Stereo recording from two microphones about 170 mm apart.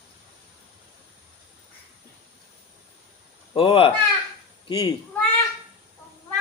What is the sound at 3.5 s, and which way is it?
Speech, 35° left (ahead or behind).